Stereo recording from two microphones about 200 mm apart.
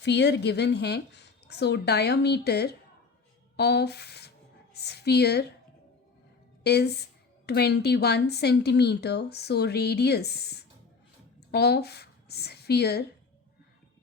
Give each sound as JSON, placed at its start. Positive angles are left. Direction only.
{"t": 0.0, "sound": "a woman's voice", "side_deg": 60}
{"t": 6.6, "sound": "a woman's voice", "side_deg": 55}